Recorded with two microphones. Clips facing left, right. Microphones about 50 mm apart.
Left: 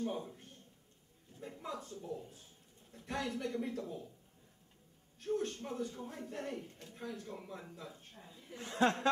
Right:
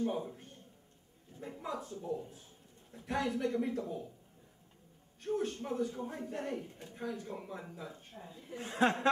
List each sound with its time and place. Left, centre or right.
0.0 s a man's voice: centre
5.2 s a man's voice: centre
8.5 s speech: centre